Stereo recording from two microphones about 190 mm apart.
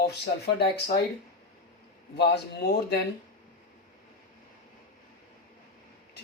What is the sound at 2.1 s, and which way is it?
Speech, 60° left (ahead or behind).